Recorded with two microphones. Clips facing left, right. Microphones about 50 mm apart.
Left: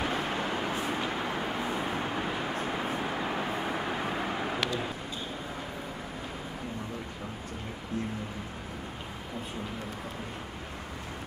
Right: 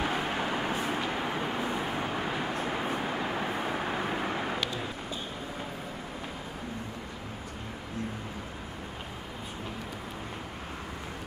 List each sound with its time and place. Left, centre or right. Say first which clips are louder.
0.0 s vehicle: right 1 dB; centre